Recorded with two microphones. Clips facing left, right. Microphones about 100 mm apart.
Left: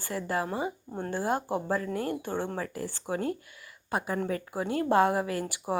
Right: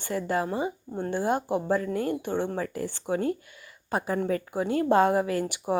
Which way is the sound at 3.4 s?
25° right (ahead or behind).